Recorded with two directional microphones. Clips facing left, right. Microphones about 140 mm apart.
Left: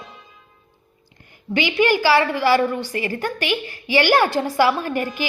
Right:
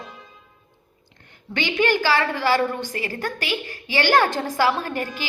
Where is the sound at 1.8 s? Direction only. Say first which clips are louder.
Left 3 dB; 15° left (ahead or behind).